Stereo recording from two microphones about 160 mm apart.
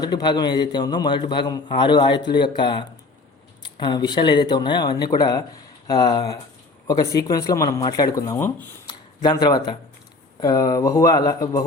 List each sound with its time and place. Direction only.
0.0 s a man's voice: 25° left (ahead or behind)
8.9 s a sound: 25° left (ahead or behind)
10.4 s a man's voice: 25° left (ahead or behind)